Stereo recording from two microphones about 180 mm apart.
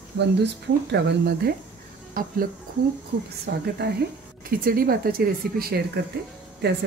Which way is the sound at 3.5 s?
60° right (ahead or behind).